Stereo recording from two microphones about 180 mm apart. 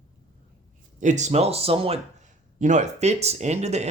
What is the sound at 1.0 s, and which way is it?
Speech, 40° right (ahead or behind).